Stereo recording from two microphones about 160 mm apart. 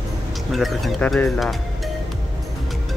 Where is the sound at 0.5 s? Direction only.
Centre (ahead or behind).